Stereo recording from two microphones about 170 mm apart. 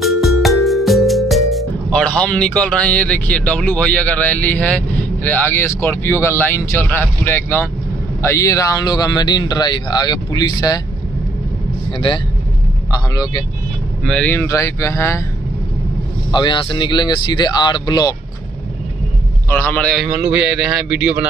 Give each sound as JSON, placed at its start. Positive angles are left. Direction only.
{"t": 0.0, "sound": "music", "side_deg": 0}
{"t": 8.2, "sound": "speech", "side_deg": 15}
{"t": 12.9, "sound": "speech", "side_deg": 20}
{"t": 14.0, "sound": "speech", "side_deg": 5}
{"t": 16.3, "sound": "speech", "side_deg": 25}
{"t": 19.5, "sound": "speech", "side_deg": 10}
{"t": 20.2, "sound": "a man's voice", "side_deg": -5}